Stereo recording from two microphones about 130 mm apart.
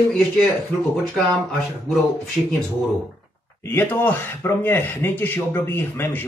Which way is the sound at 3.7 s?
15° left (ahead or behind).